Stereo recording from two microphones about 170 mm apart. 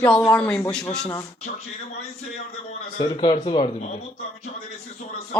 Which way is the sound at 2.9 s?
30° left (ahead or behind).